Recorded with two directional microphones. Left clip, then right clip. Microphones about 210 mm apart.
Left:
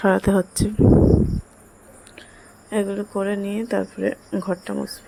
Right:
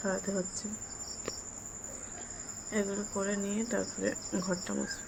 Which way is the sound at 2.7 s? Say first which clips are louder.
Left 11 dB; 30° left (ahead or behind).